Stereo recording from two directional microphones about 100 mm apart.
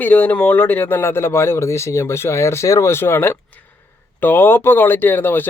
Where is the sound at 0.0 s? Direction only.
15° left (ahead or behind).